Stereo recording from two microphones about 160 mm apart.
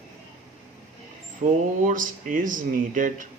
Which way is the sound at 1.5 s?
55° right (ahead or behind).